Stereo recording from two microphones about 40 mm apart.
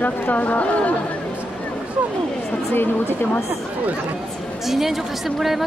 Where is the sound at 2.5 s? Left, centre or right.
Left.